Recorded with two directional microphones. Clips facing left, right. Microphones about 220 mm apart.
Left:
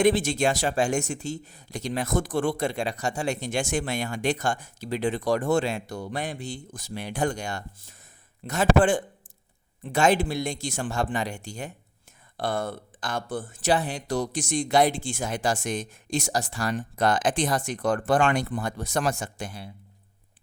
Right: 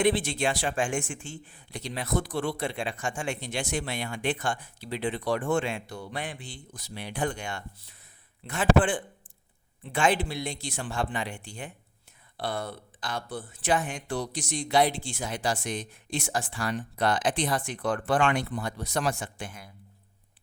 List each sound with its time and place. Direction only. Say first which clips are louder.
0.0 s speech: left 4 dB; 45° left (ahead or behind)